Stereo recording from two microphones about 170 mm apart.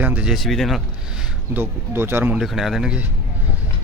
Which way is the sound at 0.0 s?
10° right (ahead or behind).